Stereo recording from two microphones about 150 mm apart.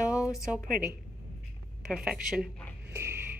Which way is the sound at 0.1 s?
20° left (ahead or behind).